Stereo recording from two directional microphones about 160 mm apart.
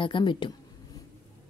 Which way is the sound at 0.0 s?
30° left (ahead or behind).